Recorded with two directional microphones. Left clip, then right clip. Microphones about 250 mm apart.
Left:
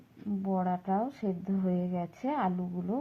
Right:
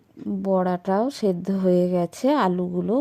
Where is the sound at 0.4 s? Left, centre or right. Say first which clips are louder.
Right 10 dB; right.